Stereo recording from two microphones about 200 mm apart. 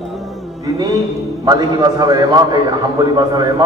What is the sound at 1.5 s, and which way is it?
Speech, 20° right (ahead or behind).